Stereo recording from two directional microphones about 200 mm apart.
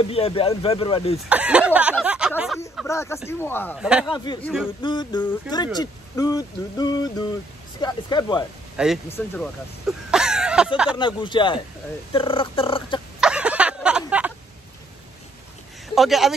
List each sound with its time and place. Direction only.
0.0 s speech: 30° left (ahead or behind)
1.3 s snicker: 5° right (ahead or behind)
2.9 s speech: 15° left (ahead or behind)
3.7 s speech: centre (ahead or behind)
4.1 s speech: 20° left (ahead or behind)
4.4 s speech: centre (ahead or behind)
4.8 s speech: 20° left (ahead or behind)
8.7 s speech: centre (ahead or behind)
11.0 s speech: 25° left (ahead or behind)
13.2 s a sound: 5° right (ahead or behind)
15.9 s speech: centre (ahead or behind)